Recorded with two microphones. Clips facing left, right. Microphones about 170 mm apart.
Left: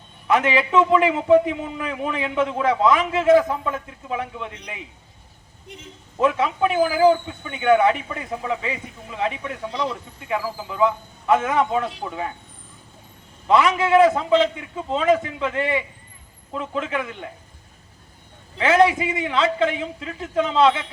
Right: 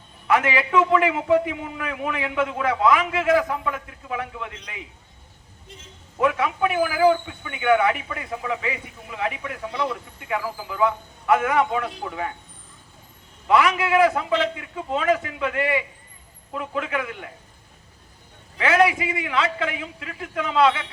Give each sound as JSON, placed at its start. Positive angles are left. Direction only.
{"t": 0.3, "sound": "a man's voice", "side_deg": 20}
{"t": 6.1, "sound": "a man's voice", "side_deg": 25}
{"t": 13.5, "sound": "a man's voice", "side_deg": 25}
{"t": 18.5, "sound": "a man's voice", "side_deg": 25}